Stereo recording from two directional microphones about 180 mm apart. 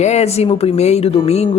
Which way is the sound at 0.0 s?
40° left (ahead or behind).